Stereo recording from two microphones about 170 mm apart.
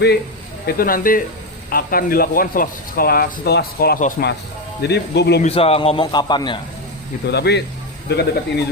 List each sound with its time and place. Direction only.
0.8 s speech: 55° left (ahead or behind)
4.8 s speech: 80° left
5.4 s a man's voice: 35° left (ahead or behind)
7.3 s speech: 75° left (ahead or behind)